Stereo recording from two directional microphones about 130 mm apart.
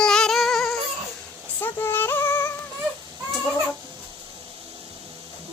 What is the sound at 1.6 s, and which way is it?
Music, 15° left (ahead or behind).